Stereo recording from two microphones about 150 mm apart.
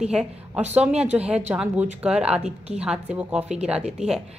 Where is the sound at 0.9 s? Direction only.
45° right (ahead or behind).